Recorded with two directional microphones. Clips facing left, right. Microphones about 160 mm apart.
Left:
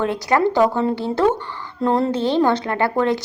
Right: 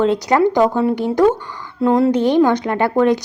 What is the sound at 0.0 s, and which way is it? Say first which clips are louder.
Speech: right 4 dB; 20° right (ahead or behind).